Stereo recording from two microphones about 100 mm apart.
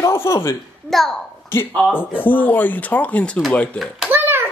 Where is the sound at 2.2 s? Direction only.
20° left (ahead or behind).